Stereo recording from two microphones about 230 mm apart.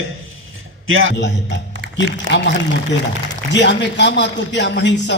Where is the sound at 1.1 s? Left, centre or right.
Left.